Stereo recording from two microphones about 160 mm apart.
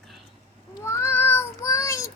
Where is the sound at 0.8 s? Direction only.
15° left (ahead or behind).